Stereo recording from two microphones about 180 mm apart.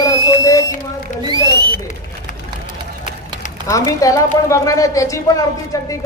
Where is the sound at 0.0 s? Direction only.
20° left (ahead or behind).